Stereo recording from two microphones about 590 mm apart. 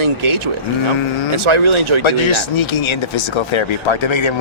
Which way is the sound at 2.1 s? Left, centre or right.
Left.